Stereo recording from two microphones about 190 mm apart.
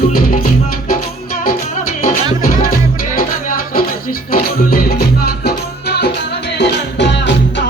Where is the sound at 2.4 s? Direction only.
50° left (ahead or behind).